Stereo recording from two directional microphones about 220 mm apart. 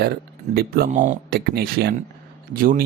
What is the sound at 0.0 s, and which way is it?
Speech, 45° right (ahead or behind).